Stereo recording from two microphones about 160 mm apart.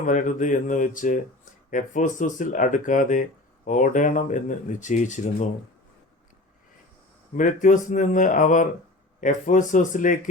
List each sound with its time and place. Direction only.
0.0 s speech: 55° left (ahead or behind)
7.3 s speech: 55° left (ahead or behind)